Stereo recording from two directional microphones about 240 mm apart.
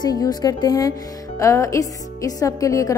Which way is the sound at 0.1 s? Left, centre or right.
Centre.